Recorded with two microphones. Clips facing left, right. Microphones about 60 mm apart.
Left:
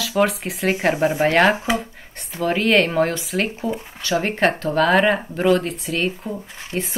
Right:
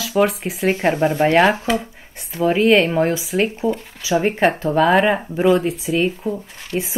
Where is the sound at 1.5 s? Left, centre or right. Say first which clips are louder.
Right 1 dB; centre.